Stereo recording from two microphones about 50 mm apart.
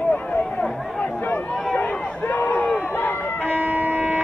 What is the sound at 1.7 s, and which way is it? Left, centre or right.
Run, left.